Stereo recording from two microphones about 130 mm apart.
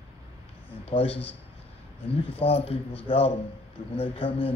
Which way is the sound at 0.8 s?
50° left (ahead or behind).